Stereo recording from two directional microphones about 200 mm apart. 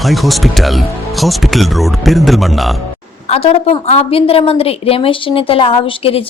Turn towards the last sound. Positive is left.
turn(degrees=30)  # may be behind; listen again after turning